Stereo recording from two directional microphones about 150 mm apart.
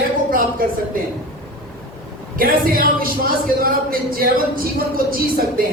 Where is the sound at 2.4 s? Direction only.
75° right (ahead or behind).